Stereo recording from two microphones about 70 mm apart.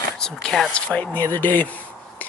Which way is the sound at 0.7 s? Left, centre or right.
Centre.